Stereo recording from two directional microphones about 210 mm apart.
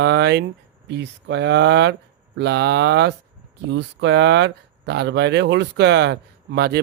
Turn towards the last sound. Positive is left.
turn(degrees=-50)  # may be behind; listen again after turning